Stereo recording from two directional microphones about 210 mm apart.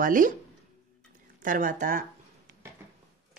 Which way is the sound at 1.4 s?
40° right (ahead or behind).